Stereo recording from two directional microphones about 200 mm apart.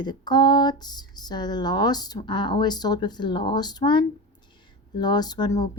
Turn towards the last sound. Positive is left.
turn(degrees=20)  # may be behind; listen again after turning